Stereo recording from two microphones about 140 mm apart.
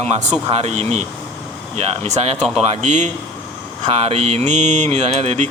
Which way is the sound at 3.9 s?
45° right (ahead or behind).